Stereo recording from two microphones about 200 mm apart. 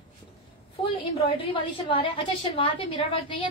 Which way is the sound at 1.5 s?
25° left (ahead or behind).